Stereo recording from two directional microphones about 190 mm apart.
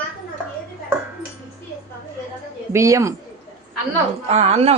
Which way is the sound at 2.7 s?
15° right (ahead or behind).